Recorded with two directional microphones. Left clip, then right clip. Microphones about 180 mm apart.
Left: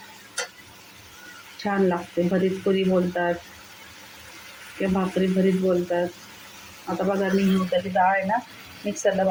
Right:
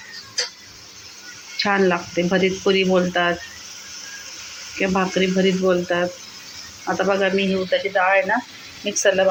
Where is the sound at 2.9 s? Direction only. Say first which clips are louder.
Right 5 dB; 15° right (ahead or behind).